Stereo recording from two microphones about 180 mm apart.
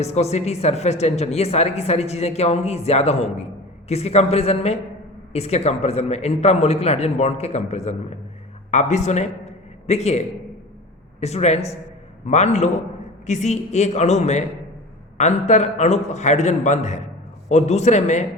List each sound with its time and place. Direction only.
0.0 s a man's voice: 35° left (ahead or behind)